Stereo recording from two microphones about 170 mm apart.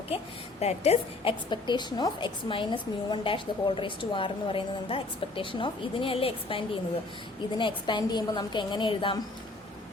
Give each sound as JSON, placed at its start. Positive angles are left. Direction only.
{"t": 0.6, "sound": "a woman's voice", "side_deg": 40}
{"t": 7.6, "sound": "a woman's voice", "side_deg": 25}